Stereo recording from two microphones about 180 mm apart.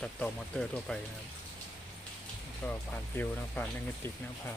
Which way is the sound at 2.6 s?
10° left (ahead or behind).